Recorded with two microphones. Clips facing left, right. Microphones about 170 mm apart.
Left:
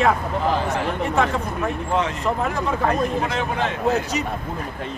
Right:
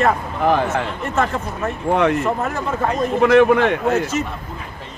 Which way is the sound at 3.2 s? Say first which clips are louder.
Right 11 dB; 60° right (ahead or behind).